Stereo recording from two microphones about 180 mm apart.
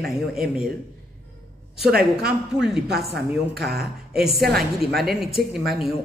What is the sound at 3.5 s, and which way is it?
Speech, 60° right (ahead or behind).